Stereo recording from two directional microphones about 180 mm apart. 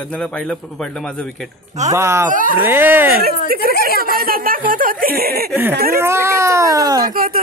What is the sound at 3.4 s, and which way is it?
Speech, 55° right (ahead or behind).